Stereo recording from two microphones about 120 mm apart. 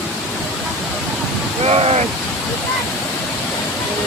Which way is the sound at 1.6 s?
55° right (ahead or behind).